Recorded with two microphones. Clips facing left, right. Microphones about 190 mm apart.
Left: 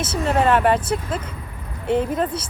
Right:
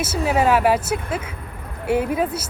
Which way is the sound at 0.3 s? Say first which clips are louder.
Even; 5° right (ahead or behind).